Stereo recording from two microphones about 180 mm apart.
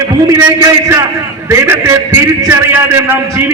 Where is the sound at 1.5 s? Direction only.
15° right (ahead or behind).